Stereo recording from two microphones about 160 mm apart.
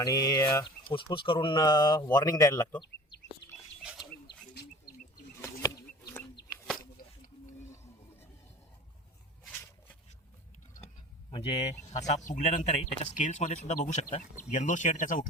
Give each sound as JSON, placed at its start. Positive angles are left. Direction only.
{"t": 0.0, "sound": "speech", "side_deg": 25}
{"t": 3.4, "sound": "bird", "side_deg": 90}
{"t": 11.3, "sound": "speech", "side_deg": 35}
{"t": 11.9, "sound": "speech", "side_deg": 50}